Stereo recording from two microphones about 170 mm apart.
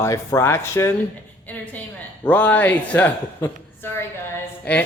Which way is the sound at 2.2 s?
10° left (ahead or behind).